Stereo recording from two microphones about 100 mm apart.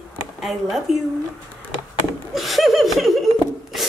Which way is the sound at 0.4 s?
Centre (ahead or behind).